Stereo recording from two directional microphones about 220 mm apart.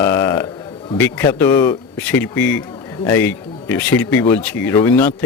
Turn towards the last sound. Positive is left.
turn(degrees=10)  # may be behind; listen again after turning